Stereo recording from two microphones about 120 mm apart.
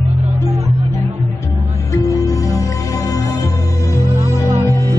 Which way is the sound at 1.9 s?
30° left (ahead or behind).